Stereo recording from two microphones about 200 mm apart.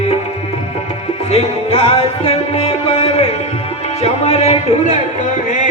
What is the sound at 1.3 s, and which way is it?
Music, 30° left (ahead or behind).